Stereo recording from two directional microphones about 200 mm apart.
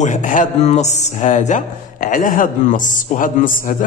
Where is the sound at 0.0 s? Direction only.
40° left (ahead or behind).